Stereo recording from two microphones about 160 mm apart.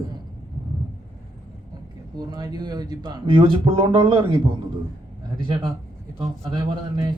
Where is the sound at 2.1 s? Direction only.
25° right (ahead or behind).